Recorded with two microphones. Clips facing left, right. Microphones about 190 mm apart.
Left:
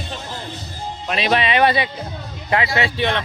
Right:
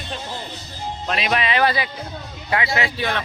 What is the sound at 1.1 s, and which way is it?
Speech, 30° left (ahead or behind).